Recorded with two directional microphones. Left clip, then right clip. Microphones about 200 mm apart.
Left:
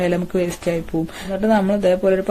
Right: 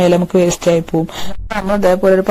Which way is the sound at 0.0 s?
40° right (ahead or behind).